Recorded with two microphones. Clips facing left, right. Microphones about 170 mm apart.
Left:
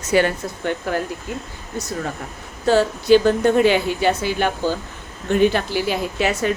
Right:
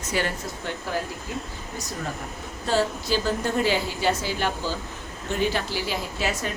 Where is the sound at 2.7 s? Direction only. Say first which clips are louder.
Left 10 dB; 65° left (ahead or behind).